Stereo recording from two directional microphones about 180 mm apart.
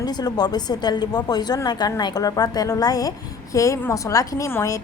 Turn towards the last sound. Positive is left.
turn(degrees=15)  # may be behind; listen again after turning